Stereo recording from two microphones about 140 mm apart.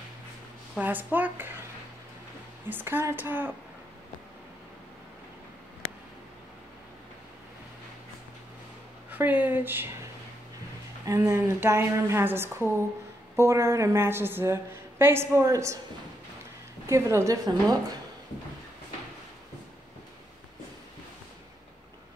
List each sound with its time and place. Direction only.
0.7 s a woman's voice: 15° right (ahead or behind)
2.7 s a woman's voice: 15° right (ahead or behind)
9.1 s a woman's voice: 10° right (ahead or behind)
11.1 s a woman's voice: 20° right (ahead or behind)
16.8 s a woman's voice: 20° right (ahead or behind)